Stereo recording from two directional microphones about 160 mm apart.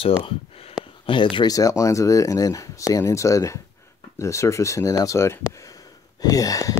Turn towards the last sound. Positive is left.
turn(degrees=20)  # may be behind; listen again after turning